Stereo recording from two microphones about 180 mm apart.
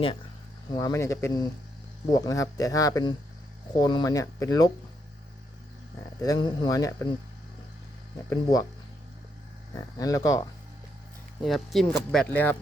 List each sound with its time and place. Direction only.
0.8 s speech: 20° left (ahead or behind)
6.2 s speech: 20° left (ahead or behind)
8.3 s speech: 20° left (ahead or behind)
9.7 s speech: 20° left (ahead or behind)
11.4 s speech: centre (ahead or behind)